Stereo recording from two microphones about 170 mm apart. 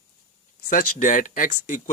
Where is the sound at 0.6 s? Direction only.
50° left (ahead or behind).